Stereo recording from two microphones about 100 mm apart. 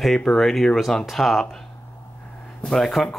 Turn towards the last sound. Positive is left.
turn(degrees=5)  # may be behind; listen again after turning